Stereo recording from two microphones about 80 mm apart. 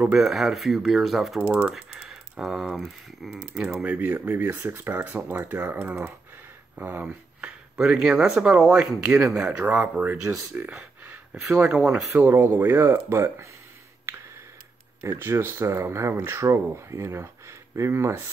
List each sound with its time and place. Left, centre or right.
0.1 s speech: centre
3.8 s speech: right
7.1 s a sound: centre
8.4 s speech: centre
11.5 s speech: centre
12.1 s speech: right
15.1 s speech: right